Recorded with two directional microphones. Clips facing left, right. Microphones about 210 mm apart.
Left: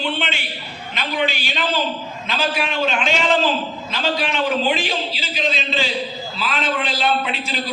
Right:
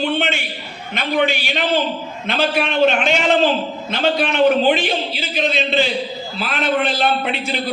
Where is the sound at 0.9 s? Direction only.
55° right (ahead or behind).